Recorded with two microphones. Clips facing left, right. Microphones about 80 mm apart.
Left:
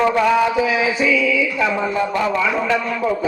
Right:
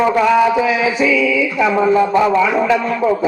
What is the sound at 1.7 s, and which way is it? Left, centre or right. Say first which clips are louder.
A man's voice: right 7 dB; centre.